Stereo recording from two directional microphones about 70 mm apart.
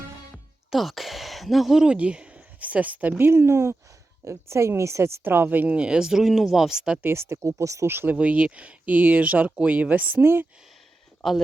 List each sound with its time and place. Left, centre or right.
0.7 s a woman's voice: centre; by 5.2 s right
5.2 s speech: right; by 7.0 s centre
7.0 s a woman's voice: right
7.4 s speech: right
7.9 s a woman's voice: right
8.1 s speech: centre